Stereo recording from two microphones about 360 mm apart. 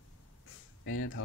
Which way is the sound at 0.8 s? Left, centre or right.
Left.